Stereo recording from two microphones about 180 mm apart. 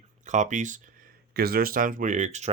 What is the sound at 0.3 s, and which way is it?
Speech, 40° right (ahead or behind).